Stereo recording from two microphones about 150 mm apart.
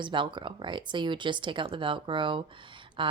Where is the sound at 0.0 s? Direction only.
30° right (ahead or behind).